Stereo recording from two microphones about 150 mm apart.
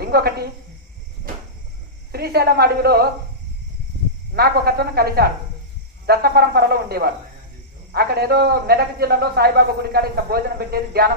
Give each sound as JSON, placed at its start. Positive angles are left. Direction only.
{"t": 0.0, "sound": "a woman's voice", "side_deg": -90}
{"t": 2.1, "sound": "a man's voice", "side_deg": -90}
{"t": 4.3, "sound": "a man's voice", "side_deg": -90}